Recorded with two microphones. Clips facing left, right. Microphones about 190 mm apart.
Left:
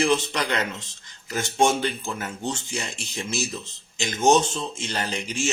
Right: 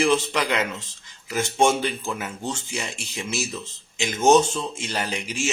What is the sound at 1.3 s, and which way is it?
A man's voice, 5° right (ahead or behind).